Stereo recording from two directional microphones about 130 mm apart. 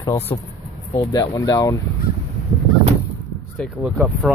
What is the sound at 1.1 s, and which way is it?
Speech, 25° left (ahead or behind).